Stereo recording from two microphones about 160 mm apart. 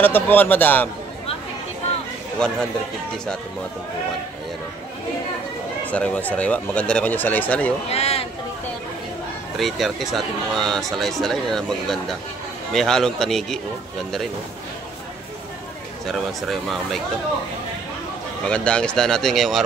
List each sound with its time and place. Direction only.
0.0 s speech: 10° left (ahead or behind)
5.9 s speech: 10° left (ahead or behind)
7.9 s a man's voice: 40° left (ahead or behind)
9.6 s speech: centre (ahead or behind)
16.1 s speech: centre (ahead or behind)
18.5 s speech: 5° left (ahead or behind)